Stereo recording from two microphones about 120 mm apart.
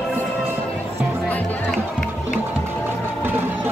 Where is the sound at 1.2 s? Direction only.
10° left (ahead or behind).